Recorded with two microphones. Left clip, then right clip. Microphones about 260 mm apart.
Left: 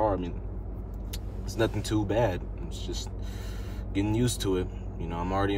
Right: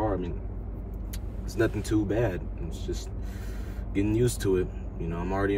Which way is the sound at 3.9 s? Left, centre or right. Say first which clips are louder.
Right 2 dB; centre.